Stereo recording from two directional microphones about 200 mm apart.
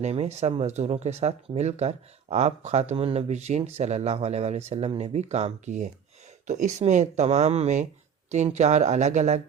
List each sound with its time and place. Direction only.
0.0 s speech: 30° right (ahead or behind)